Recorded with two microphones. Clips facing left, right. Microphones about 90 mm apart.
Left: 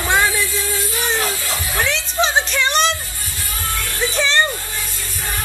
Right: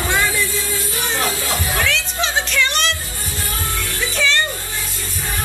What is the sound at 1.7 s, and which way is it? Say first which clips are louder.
Music: left 5 dB; 25° left (ahead or behind).